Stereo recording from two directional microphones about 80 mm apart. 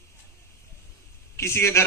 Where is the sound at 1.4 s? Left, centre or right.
Left.